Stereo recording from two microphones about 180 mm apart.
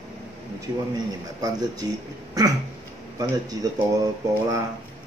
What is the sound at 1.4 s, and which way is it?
Speech, 20° right (ahead or behind).